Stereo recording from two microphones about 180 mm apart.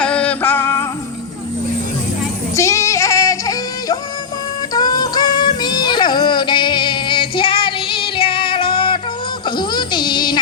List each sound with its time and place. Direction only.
0.0 s singing: 5° left (ahead or behind)
2.6 s music: 15° left (ahead or behind)
9.6 s a sound: 25° left (ahead or behind)